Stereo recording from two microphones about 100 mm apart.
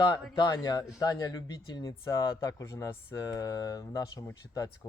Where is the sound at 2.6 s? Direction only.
25° left (ahead or behind).